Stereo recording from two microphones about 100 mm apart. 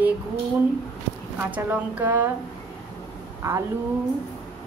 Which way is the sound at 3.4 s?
30° right (ahead or behind).